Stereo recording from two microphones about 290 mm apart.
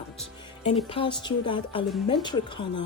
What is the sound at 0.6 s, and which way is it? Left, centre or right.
A woman's voice, centre.